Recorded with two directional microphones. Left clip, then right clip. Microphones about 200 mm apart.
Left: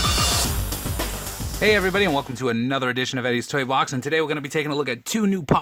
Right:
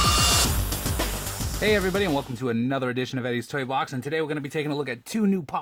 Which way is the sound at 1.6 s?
20° left (ahead or behind).